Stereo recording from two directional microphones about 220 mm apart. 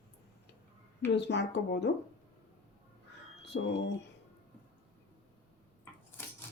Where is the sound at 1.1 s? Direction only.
50° left (ahead or behind).